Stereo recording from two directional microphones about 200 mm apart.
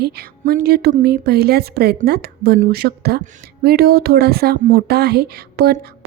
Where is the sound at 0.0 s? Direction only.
50° right (ahead or behind).